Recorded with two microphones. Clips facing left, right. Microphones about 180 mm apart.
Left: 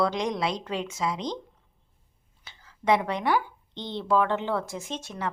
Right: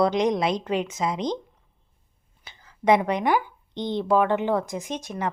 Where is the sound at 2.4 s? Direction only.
15° right (ahead or behind).